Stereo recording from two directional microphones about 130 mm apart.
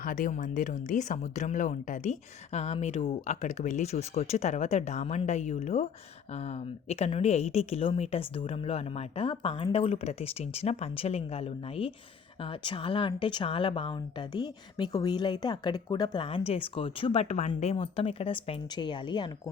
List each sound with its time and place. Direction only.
0.0 s a woman's voice: 90° left; by 17.5 s 60° left (ahead or behind)
17.6 s a woman's voice: 50° left (ahead or behind)
18.7 s speech: 35° left (ahead or behind)